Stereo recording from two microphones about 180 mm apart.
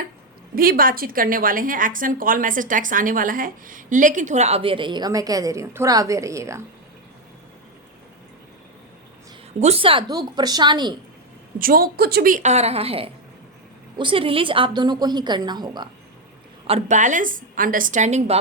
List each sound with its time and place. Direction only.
0.5 s a woman's voice: 55° right (ahead or behind); by 6.6 s 15° right (ahead or behind)
9.6 s a woman's voice: 35° right (ahead or behind)
11.6 s a woman's voice: 55° right (ahead or behind); by 15.9 s 25° right (ahead or behind)
16.6 s a woman's voice: 40° right (ahead or behind)